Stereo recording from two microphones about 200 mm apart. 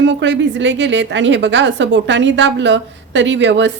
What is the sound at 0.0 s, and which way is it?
A woman's voice, 65° right (ahead or behind).